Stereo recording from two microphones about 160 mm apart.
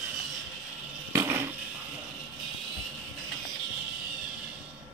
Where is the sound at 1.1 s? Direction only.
15° right (ahead or behind).